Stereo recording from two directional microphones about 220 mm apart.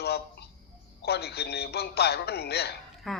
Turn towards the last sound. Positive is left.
turn(degrees=0)  # may be behind; listen again after turning